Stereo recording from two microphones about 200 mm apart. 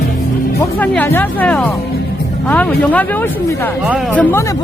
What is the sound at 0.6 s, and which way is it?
Speech, 10° left (ahead or behind).